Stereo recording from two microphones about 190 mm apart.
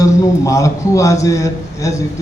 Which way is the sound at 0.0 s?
15° left (ahead or behind).